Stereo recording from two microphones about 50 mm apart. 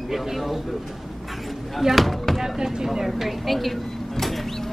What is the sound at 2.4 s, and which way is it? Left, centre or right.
Music, centre.